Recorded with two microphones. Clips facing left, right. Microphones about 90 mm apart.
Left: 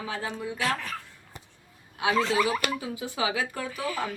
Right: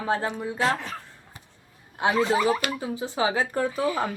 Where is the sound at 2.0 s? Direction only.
20° right (ahead or behind).